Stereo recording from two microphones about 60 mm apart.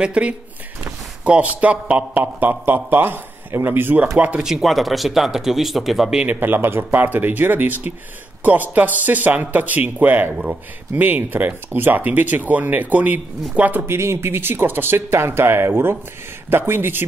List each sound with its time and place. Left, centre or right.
0.0 s speech: right
2.4 s speech: right
4.2 s speech: centre
4.5 s speech: centre
6.2 s speech: right
10.3 s speech: centre
11.0 s speech: right
13.8 s speech: right